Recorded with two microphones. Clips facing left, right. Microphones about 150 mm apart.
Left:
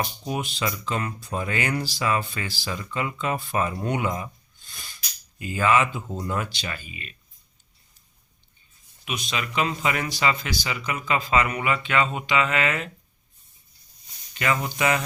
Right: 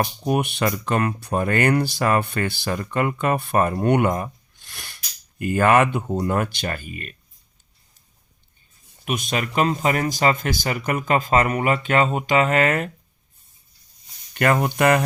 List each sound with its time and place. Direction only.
0.0 s speech: 60° right (ahead or behind); by 4.9 s 75° right (ahead or behind)
5.4 s speech: 60° right (ahead or behind)
9.0 s speech: 50° right (ahead or behind)
14.3 s speech: 55° right (ahead or behind)